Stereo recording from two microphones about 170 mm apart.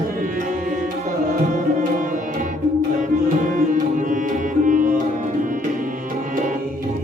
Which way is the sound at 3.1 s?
50° right (ahead or behind).